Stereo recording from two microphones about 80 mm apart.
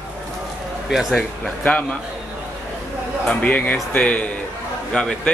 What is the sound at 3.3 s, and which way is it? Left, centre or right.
Speech, centre.